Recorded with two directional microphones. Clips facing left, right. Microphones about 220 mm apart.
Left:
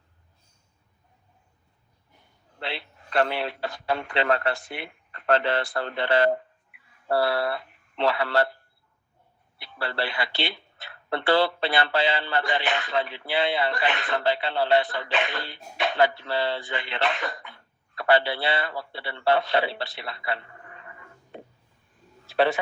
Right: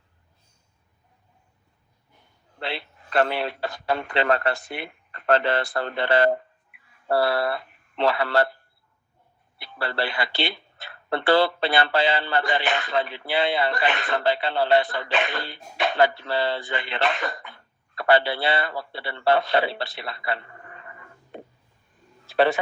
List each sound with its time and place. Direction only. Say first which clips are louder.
2.6 s speech: right 2 dB; 45° right (ahead or behind)
9.6 s speech: right 2 dB; 45° right (ahead or behind)
22.4 s speech: right 2 dB; 40° right (ahead or behind)